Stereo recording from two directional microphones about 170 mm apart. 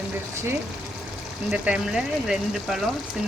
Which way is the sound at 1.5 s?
5° right (ahead or behind).